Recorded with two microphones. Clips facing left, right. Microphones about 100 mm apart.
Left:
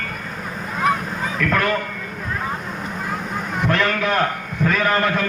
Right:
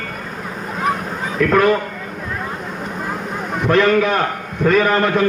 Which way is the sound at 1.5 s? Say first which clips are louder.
Right 7 dB; 15° right (ahead or behind).